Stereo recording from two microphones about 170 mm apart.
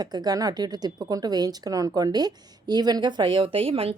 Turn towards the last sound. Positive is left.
turn(degrees=-35)  # may be behind; listen again after turning